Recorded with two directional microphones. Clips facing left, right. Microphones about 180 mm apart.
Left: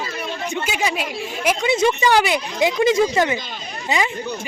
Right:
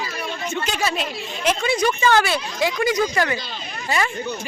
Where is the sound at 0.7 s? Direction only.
10° left (ahead or behind).